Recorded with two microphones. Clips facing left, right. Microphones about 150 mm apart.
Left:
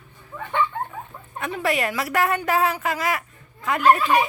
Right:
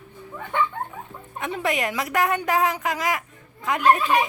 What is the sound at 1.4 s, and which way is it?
A woman's voice, 20° right (ahead or behind).